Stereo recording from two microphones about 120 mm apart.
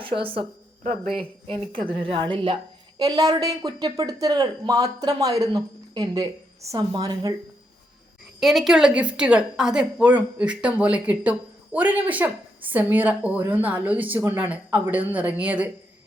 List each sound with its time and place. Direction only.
0.0 s speech: 45° right (ahead or behind)
1.7 s a woman's voice: 45° right (ahead or behind)
3.0 s speech: 30° right (ahead or behind)
8.4 s a woman's voice: centre (ahead or behind)